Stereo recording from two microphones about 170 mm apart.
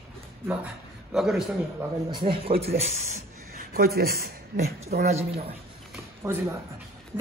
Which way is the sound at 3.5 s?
60° right (ahead or behind).